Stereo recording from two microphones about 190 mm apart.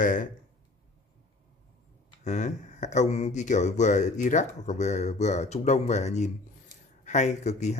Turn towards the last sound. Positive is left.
turn(degrees=35)  # may be behind; listen again after turning